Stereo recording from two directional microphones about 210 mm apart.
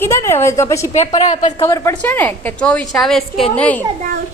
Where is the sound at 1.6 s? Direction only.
15° left (ahead or behind).